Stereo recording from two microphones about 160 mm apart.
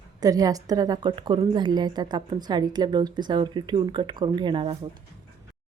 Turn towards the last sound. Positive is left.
turn(degrees=-35)  # may be behind; listen again after turning